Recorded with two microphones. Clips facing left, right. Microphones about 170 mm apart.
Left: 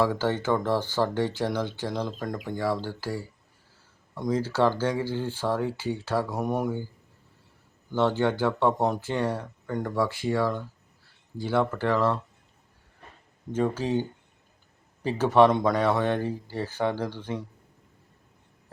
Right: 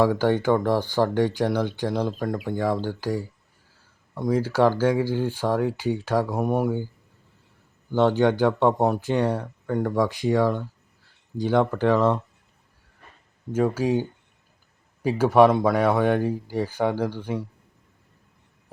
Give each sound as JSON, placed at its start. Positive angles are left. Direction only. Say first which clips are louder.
{"t": 0.0, "sound": "speech", "louder": "right 5 dB", "side_deg": -15}
{"t": 7.9, "sound": "speech", "louder": "right 5 dB", "side_deg": -15}
{"t": 13.5, "sound": "speech", "louder": "right 4 dB", "side_deg": -10}
{"t": 15.0, "sound": "speech", "louder": "right 3 dB", "side_deg": -10}